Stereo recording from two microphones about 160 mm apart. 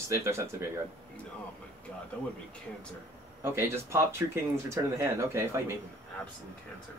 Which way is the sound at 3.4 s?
15° right (ahead or behind).